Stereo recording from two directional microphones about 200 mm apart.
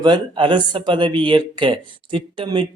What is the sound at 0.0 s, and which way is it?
Speech, 25° right (ahead or behind).